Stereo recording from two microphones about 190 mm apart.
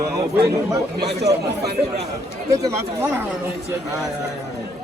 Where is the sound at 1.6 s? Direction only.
60° right (ahead or behind).